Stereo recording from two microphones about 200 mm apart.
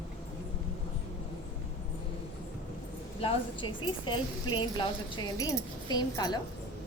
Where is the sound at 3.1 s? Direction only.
25° left (ahead or behind).